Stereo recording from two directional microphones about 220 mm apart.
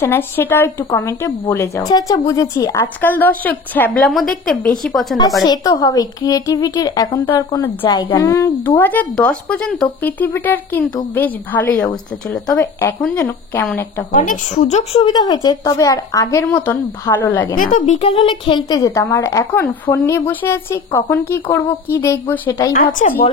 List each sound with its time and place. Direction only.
0.0 s speech: 10° left (ahead or behind)
5.4 s speech: 20° left (ahead or behind)
14.1 s speech: 35° left (ahead or behind); by 17.6 s 10° left (ahead or behind)
17.6 s speech: 35° left (ahead or behind); by 22.7 s 10° left (ahead or behind)
23.0 s a woman's voice: 30° left (ahead or behind)